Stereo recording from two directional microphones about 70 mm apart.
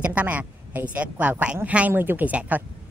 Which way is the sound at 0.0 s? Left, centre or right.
Right.